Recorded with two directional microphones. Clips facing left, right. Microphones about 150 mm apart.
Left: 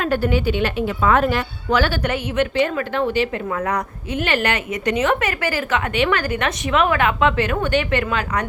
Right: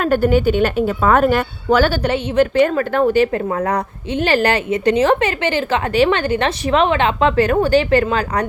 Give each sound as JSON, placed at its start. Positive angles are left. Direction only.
{"t": 0.0, "sound": "a woman's voice", "side_deg": -45}
{"t": 2.0, "sound": "a woman's voice", "side_deg": -30}
{"t": 2.6, "sound": "a woman's voice", "side_deg": -45}